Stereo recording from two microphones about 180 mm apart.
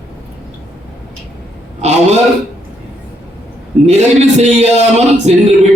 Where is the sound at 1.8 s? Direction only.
40° right (ahead or behind).